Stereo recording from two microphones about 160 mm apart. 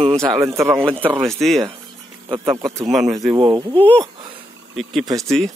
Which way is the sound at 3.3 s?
25° right (ahead or behind).